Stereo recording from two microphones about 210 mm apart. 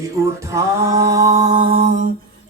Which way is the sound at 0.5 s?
15° right (ahead or behind).